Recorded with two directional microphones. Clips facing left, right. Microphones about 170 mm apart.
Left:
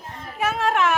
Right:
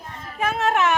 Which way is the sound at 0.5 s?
Centre (ahead or behind).